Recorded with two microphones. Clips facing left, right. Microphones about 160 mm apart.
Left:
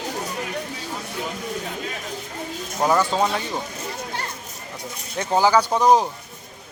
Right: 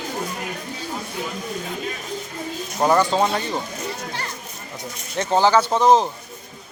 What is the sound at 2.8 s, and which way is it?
Speech, centre (ahead or behind).